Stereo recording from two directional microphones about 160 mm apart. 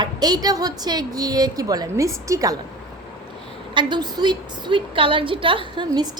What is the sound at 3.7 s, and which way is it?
A woman's voice, 25° right (ahead or behind).